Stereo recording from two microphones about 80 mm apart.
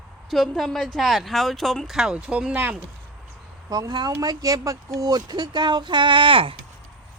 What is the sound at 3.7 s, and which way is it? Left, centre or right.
Speech, right.